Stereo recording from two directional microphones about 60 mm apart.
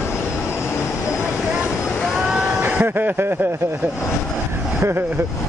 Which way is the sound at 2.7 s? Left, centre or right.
Right.